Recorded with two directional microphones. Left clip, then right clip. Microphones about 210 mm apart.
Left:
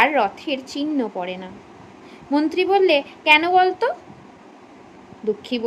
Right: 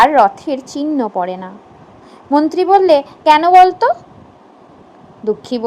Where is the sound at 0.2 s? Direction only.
25° right (ahead or behind).